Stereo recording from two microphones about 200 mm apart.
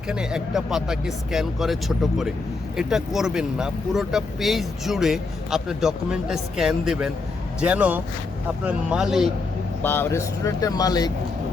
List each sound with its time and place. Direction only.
0.1 s speech: 5° right (ahead or behind)
9.8 s speech: 10° left (ahead or behind)